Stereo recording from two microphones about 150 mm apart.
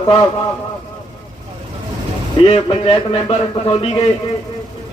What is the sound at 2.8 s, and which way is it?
A man's voice, 35° left (ahead or behind).